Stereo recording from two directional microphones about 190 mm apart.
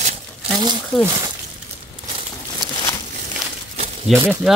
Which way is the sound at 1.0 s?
20° right (ahead or behind).